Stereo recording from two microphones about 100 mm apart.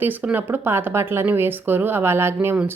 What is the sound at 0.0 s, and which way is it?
Speech, 15° right (ahead or behind).